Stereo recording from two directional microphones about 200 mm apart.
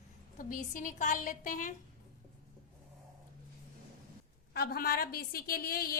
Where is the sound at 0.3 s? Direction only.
40° left (ahead or behind).